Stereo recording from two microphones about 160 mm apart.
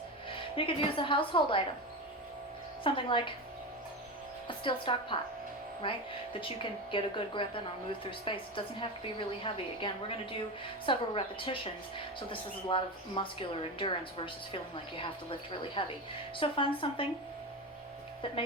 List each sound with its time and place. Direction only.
0.3 s a woman's voice: 35° left (ahead or behind)
2.8 s a woman's voice: 30° left (ahead or behind)
4.4 s a woman's voice: 30° left (ahead or behind)